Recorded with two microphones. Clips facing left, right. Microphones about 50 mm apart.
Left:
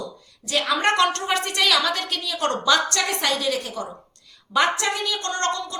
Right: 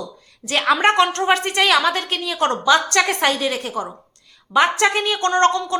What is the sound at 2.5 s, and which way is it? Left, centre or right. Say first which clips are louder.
Speech: right 3 dB; centre.